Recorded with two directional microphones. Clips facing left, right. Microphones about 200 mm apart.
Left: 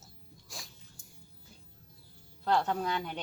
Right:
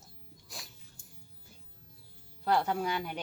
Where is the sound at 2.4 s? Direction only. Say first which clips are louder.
Even; 10° right (ahead or behind).